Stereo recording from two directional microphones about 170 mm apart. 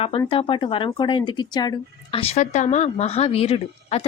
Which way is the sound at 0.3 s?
30° left (ahead or behind).